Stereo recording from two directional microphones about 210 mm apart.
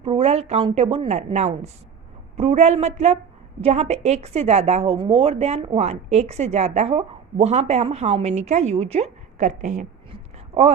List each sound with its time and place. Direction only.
0.0 s a woman's voice: 30° right (ahead or behind)